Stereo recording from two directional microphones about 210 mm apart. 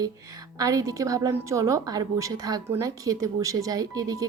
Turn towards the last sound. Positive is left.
turn(degrees=-15)  # may be behind; listen again after turning